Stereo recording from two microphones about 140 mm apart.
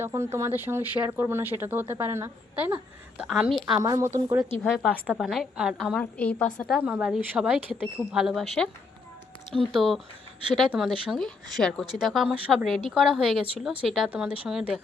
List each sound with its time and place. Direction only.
0.0 s speech: 20° right (ahead or behind); by 3.8 s 5° right (ahead or behind)
3.8 s a woman's voice: 25° right (ahead or behind)
4.6 s a woman's voice: 10° left (ahead or behind)